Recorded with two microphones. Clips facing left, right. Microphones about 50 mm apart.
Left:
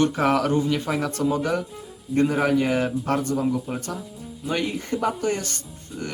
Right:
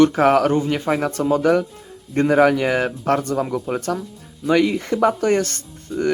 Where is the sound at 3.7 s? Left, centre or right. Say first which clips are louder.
Right 6 dB; right.